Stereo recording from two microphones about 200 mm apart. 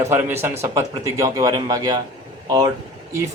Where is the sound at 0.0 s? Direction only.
10° right (ahead or behind).